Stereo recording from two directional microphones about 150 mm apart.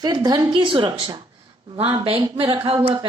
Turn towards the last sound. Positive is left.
turn(degrees=-30)  # may be behind; listen again after turning